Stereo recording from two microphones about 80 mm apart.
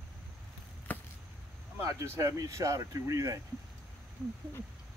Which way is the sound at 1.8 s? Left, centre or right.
Right.